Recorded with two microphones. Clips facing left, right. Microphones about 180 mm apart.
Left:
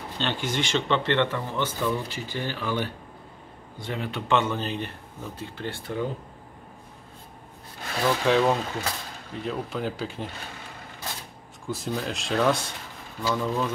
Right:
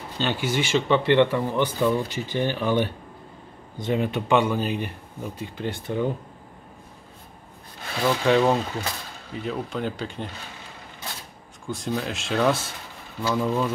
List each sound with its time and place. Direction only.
0.2 s speech: 5° right (ahead or behind)
8.0 s speech: 5° right (ahead or behind)
11.6 s speech: centre (ahead or behind)